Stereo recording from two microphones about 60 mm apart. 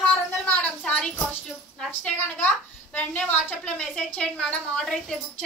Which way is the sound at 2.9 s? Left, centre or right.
Left.